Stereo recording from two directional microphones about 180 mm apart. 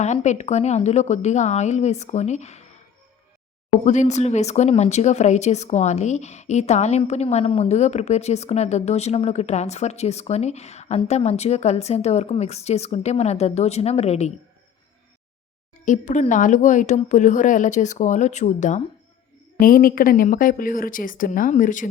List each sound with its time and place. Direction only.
0.0 s speech: 40° left (ahead or behind)
3.8 s speech: 40° left (ahead or behind)
15.8 s speech: 45° left (ahead or behind)